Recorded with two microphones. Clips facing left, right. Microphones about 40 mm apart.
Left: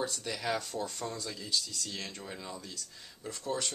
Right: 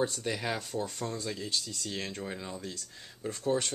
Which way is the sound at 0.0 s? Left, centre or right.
Right.